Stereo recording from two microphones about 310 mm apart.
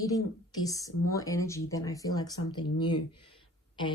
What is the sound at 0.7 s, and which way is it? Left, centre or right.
Speech, centre.